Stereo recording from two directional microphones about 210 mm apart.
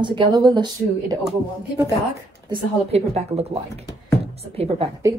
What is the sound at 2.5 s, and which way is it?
A woman's voice, 30° right (ahead or behind).